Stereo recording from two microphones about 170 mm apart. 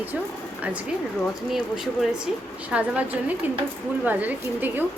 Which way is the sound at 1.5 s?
Centre (ahead or behind).